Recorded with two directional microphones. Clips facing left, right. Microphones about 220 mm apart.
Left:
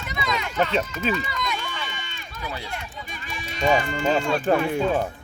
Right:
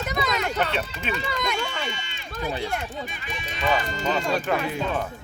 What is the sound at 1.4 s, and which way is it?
Run, 50° right (ahead or behind).